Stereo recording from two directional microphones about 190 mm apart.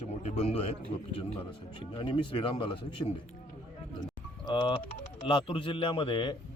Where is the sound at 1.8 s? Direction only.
25° left (ahead or behind).